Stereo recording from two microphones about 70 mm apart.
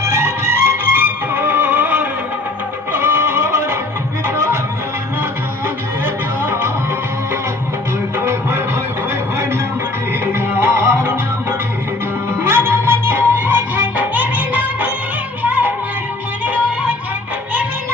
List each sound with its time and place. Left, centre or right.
0.0 s music: right
6.4 s music: right
8.2 s music: right
10.3 s music: right